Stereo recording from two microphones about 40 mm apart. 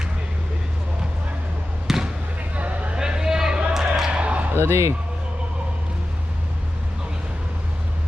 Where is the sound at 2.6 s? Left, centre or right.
Right.